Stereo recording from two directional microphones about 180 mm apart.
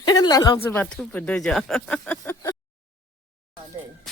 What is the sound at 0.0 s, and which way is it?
Speech, 20° left (ahead or behind).